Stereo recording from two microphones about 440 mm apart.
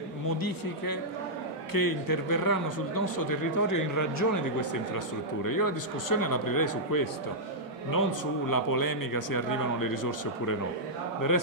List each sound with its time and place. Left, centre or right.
0.4 s speech: left
8.5 s speech: left